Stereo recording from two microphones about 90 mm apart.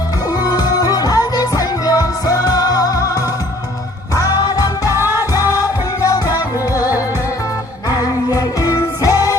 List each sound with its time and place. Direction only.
0.4 s music: 45° left (ahead or behind)
4.9 s music: 25° right (ahead or behind)
5.3 s music: 40° left (ahead or behind)